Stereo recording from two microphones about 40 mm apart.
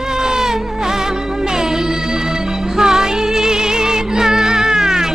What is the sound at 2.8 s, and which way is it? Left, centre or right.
Music, centre.